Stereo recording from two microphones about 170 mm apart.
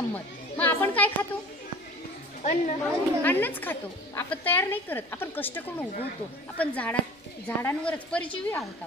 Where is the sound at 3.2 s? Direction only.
10° left (ahead or behind).